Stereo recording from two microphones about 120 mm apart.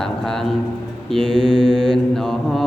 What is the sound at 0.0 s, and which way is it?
Speech, 5° left (ahead or behind).